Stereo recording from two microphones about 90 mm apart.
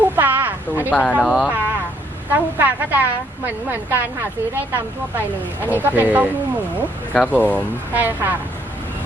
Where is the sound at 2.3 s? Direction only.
20° right (ahead or behind).